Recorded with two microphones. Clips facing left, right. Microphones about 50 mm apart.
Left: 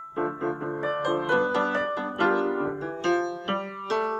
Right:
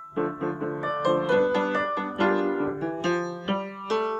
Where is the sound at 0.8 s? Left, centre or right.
Centre.